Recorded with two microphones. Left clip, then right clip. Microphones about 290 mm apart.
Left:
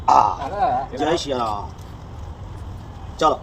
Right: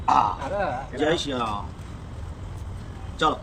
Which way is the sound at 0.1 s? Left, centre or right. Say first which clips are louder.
Left 5 dB; right.